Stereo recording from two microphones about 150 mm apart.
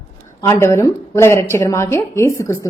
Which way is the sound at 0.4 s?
15° left (ahead or behind).